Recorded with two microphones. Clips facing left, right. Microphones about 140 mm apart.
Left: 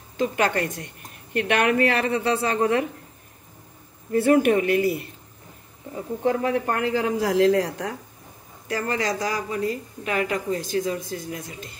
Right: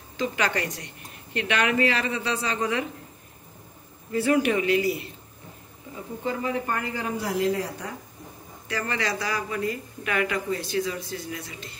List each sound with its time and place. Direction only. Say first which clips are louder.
0.2 s speech: left 4 dB; 50° left (ahead or behind)
4.1 s speech: left 4 dB; 50° left (ahead or behind)
6.2 s speech: left 5 dB; 65° left (ahead or behind); by 7.9 s 90° left
8.6 s speech: left 3 dB; 40° left (ahead or behind)